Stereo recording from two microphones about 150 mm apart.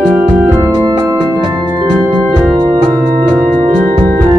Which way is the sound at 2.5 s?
30° right (ahead or behind).